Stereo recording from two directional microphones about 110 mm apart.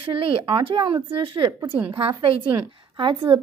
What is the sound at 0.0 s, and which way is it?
A woman's voice, 55° right (ahead or behind).